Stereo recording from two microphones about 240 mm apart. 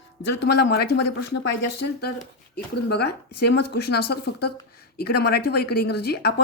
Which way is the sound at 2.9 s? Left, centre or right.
Left.